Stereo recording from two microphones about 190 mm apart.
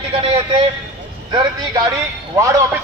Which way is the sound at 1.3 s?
20° right (ahead or behind).